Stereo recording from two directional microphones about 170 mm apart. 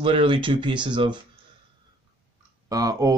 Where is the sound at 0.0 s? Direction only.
30° right (ahead or behind).